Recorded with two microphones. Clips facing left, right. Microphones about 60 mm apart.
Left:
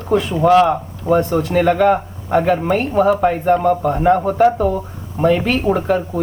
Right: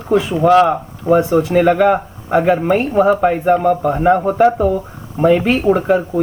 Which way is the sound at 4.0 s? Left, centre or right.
Centre.